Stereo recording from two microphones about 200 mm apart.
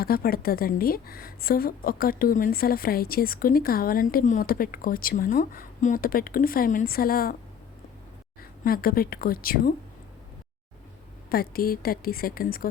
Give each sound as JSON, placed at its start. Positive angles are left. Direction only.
{"t": 0.0, "sound": "a woman's voice", "side_deg": 50}
{"t": 8.4, "sound": "speech", "side_deg": 50}
{"t": 11.3, "sound": "a woman's voice", "side_deg": 50}